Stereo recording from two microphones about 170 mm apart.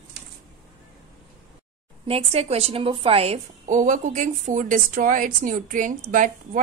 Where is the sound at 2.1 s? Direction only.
35° right (ahead or behind).